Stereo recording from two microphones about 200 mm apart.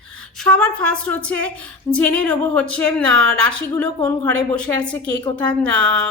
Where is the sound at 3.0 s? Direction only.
85° right.